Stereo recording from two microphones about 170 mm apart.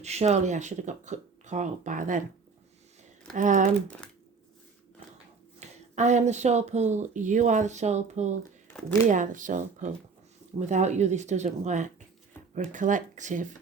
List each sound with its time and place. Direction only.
0.0 s speech: 40° right (ahead or behind)
3.3 s speech: 50° right (ahead or behind)
3.8 s speech: 5° left (ahead or behind)
5.5 s speech: 45° right (ahead or behind)